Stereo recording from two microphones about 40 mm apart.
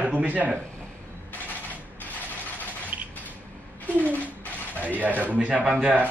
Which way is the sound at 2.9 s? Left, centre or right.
Right.